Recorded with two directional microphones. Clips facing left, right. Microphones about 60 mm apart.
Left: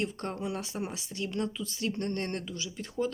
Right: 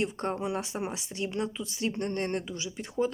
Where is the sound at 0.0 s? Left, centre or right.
Right.